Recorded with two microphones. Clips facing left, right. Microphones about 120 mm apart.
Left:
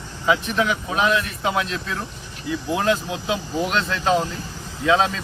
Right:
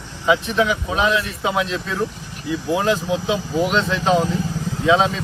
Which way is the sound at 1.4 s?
Centre (ahead or behind).